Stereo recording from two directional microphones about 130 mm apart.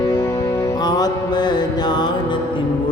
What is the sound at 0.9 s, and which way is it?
Mantra, 30° left (ahead or behind).